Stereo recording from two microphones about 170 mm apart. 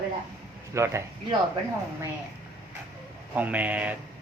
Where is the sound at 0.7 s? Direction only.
15° right (ahead or behind).